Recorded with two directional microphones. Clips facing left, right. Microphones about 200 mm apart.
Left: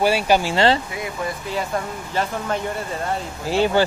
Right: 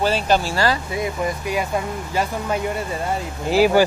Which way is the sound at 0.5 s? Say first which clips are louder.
Left 3 dB; 25° left (ahead or behind).